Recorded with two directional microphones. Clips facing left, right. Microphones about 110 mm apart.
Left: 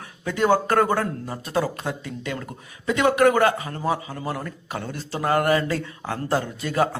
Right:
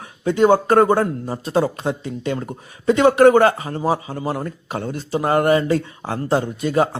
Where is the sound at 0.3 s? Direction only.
25° right (ahead or behind).